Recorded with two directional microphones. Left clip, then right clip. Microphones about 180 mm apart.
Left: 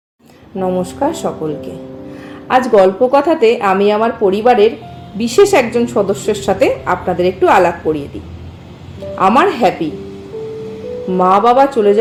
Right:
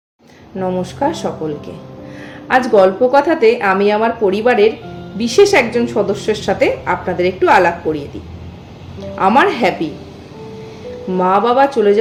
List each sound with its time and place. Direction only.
0.6 s a woman's voice: 15° left (ahead or behind)
9.1 s speech: 15° left (ahead or behind)
11.1 s speech: 15° left (ahead or behind)